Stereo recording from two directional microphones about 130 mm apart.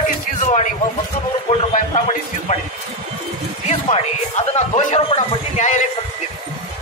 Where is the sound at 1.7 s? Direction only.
70° left (ahead or behind).